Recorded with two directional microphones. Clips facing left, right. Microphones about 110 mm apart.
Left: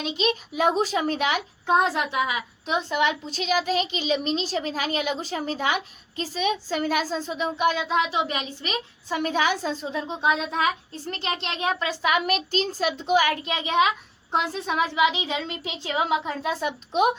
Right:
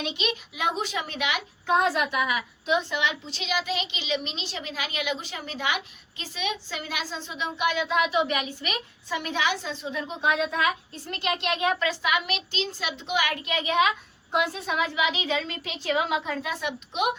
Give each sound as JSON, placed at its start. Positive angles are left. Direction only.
{"t": 0.0, "sound": "a child's voice", "side_deg": 40}
{"t": 1.7, "sound": "a woman's voice", "side_deg": 25}
{"t": 2.6, "sound": "a child's voice", "side_deg": 40}
{"t": 7.9, "sound": "a woman's voice", "side_deg": 30}
{"t": 9.0, "sound": "a child's voice", "side_deg": 45}
{"t": 10.0, "sound": "a woman's voice", "side_deg": 25}
{"t": 12.0, "sound": "a child's voice", "side_deg": 45}